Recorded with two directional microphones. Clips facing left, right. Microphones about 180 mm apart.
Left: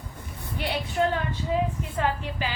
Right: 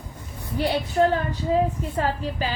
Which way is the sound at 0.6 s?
35° right (ahead or behind).